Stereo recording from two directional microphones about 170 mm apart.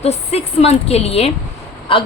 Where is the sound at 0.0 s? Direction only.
40° left (ahead or behind).